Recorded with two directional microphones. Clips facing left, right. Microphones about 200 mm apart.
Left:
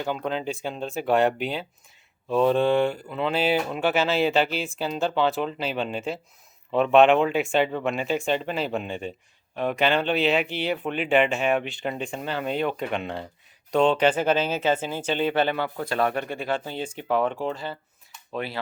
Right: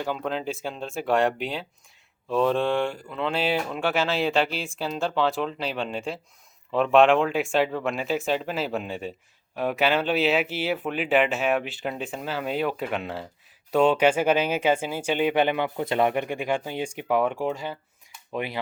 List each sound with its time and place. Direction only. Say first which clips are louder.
0.0 s speech: left 1 dB; centre (ahead or behind)